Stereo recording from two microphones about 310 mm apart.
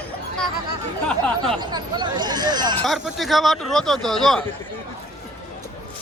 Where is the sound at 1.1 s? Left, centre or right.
Centre.